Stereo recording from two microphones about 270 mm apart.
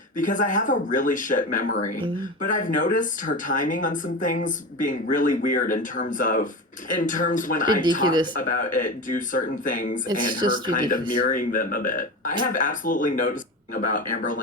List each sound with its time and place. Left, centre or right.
0.2 s speech: left
7.7 s speech: centre
8.4 s speech: left